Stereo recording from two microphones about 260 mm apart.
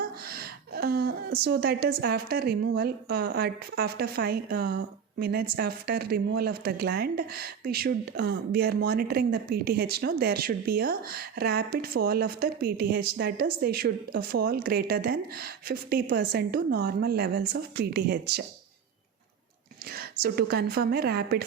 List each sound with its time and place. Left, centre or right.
0.0 s speech: right
19.8 s speech: right